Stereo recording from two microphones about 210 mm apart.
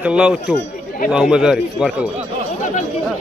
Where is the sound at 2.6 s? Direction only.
35° left (ahead or behind).